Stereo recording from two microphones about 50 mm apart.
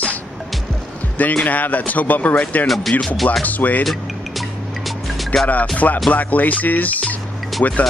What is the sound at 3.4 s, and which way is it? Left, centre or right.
Speech, left.